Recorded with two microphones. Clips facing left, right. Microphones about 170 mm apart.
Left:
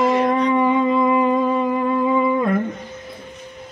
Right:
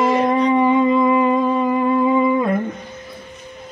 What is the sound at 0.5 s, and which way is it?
Wind instrument, 5° right (ahead or behind).